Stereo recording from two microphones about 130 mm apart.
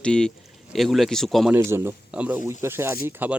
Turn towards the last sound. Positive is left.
turn(degrees=-15)  # may be behind; listen again after turning